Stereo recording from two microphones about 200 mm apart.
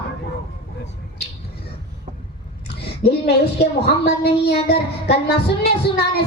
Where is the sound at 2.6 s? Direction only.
55° left (ahead or behind).